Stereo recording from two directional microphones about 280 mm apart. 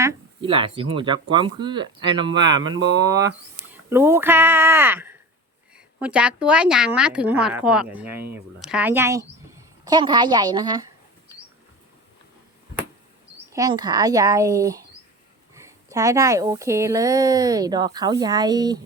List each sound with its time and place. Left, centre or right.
0.0 s a woman's voice: centre
13.5 s speech: centre